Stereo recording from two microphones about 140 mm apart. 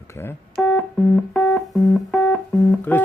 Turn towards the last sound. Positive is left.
turn(degrees=10)  # may be behind; listen again after turning